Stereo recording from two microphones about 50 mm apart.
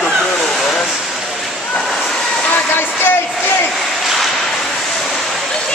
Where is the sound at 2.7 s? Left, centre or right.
Left.